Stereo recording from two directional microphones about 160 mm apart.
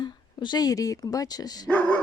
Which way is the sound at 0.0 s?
25° left (ahead or behind).